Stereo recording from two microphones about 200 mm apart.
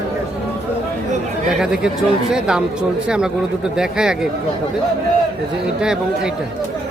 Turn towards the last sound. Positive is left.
turn(degrees=-5)  # may be behind; listen again after turning